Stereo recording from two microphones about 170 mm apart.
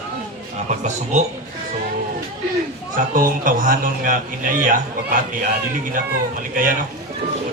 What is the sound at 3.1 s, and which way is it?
A man's voice, 55° right (ahead or behind).